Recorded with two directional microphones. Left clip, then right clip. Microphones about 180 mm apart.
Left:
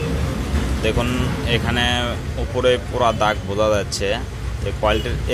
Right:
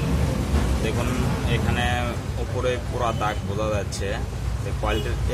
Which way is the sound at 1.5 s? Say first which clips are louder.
Left 7 dB; 35° left (ahead or behind).